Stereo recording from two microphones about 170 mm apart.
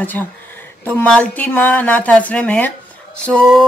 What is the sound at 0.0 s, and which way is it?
Speech, 10° left (ahead or behind).